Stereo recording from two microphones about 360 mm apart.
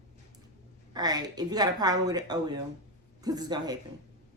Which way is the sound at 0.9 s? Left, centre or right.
Centre.